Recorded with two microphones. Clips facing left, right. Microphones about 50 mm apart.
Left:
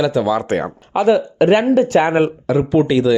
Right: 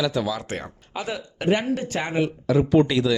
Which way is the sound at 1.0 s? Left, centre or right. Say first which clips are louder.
Left 12 dB; left.